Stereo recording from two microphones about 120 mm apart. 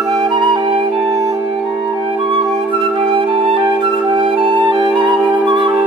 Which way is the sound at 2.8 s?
45° right (ahead or behind).